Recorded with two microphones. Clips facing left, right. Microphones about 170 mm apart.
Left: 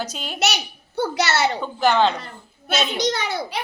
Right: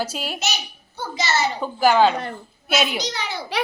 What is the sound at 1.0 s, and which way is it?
Speech, 70° left (ahead or behind).